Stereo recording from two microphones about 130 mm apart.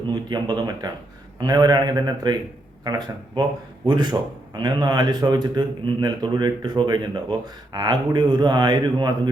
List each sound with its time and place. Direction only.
0.1 s speech: 35° right (ahead or behind)